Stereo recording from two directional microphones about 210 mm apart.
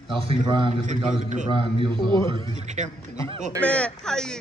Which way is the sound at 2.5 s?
35° right (ahead or behind).